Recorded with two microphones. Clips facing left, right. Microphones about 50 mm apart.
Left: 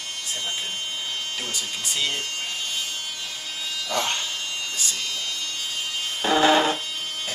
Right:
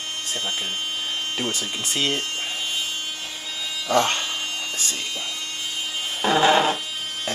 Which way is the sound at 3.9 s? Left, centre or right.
Right.